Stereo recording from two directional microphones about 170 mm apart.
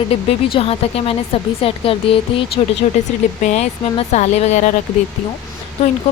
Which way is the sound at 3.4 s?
45° left (ahead or behind).